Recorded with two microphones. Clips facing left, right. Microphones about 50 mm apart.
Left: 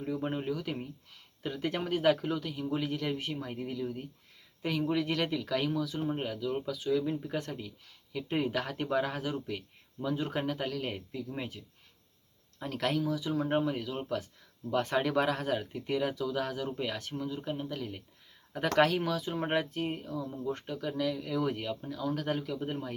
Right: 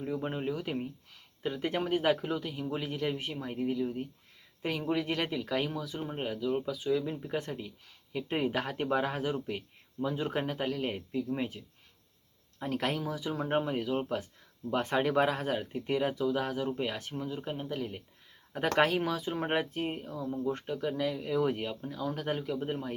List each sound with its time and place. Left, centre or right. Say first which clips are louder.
0.2 s speech: even; centre
0.5 s speech: right 1 dB; centre
12.6 s speech: left 1 dB; centre